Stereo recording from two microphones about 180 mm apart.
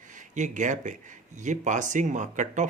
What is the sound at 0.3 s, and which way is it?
Speech, 45° right (ahead or behind).